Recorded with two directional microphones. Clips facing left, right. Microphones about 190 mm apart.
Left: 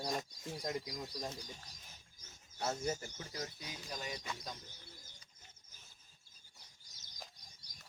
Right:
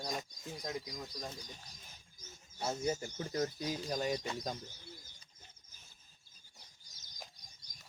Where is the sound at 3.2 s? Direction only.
45° right (ahead or behind).